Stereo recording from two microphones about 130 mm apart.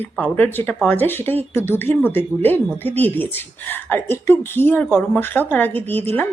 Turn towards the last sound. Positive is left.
turn(degrees=15)  # may be behind; listen again after turning